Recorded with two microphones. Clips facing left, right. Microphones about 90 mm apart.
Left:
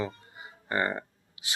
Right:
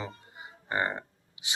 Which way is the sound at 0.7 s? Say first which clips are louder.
Left 1 dB; 15° right (ahead or behind).